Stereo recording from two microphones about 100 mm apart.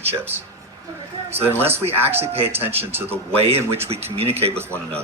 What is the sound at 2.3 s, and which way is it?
Speech, 80° right.